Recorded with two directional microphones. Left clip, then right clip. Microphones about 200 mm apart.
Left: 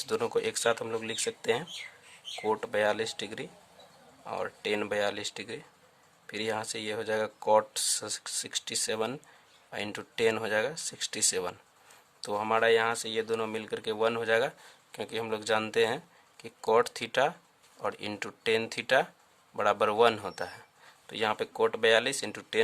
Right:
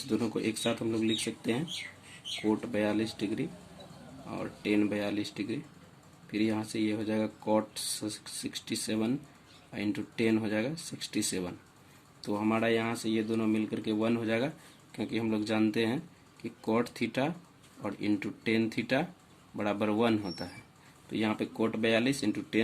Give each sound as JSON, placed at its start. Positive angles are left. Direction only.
{"t": 0.1, "sound": "speech", "side_deg": 50}